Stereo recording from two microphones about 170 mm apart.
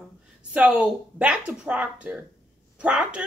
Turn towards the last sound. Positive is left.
turn(degrees=-5)  # may be behind; listen again after turning